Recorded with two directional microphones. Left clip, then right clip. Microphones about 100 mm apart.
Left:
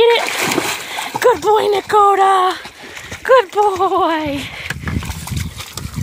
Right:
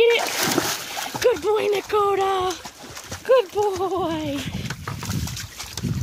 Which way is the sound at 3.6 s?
Centre (ahead or behind).